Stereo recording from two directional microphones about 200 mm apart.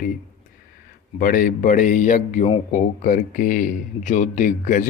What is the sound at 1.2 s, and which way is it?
Speech, 45° left (ahead or behind).